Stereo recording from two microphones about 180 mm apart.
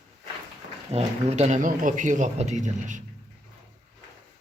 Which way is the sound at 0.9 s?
35° right (ahead or behind).